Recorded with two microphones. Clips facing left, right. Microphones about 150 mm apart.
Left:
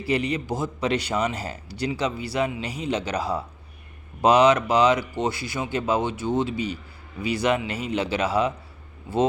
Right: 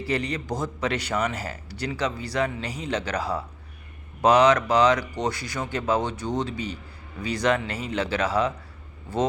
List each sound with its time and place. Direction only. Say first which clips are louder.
0.0 s a man's voice: left 3 dB; 10° left (ahead or behind)